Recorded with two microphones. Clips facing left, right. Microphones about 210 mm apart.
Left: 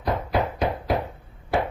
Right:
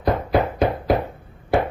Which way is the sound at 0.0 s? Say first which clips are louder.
Right 5 dB; 60° right (ahead or behind).